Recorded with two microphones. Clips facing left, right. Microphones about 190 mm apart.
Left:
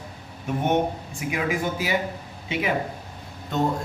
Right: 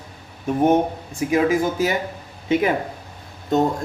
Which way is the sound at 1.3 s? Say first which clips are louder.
Right 7 dB; 40° right (ahead or behind).